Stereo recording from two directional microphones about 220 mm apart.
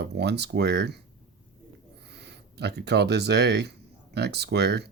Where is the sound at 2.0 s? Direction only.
50° right (ahead or behind).